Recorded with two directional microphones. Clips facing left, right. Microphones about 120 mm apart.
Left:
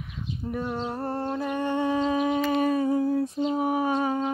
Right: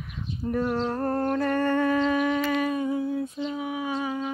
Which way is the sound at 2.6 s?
35° left (ahead or behind).